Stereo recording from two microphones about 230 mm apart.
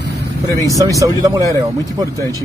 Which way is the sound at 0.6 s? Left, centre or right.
Centre.